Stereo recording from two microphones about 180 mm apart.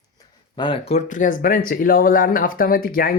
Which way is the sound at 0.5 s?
30° left (ahead or behind).